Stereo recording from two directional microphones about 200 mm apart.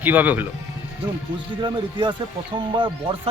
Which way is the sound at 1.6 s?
25° right (ahead or behind).